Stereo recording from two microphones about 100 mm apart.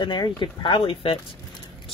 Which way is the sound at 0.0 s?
50° left (ahead or behind).